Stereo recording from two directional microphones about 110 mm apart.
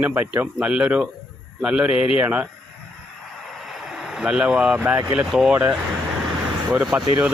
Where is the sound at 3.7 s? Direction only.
5° right (ahead or behind).